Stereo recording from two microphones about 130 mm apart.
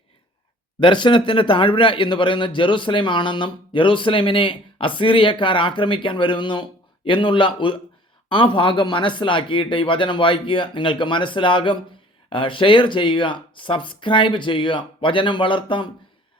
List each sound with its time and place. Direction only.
0.8 s speech: 40° left (ahead or behind)